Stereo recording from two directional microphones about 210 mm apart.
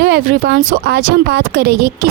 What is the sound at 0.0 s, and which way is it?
Speech, 50° right (ahead or behind).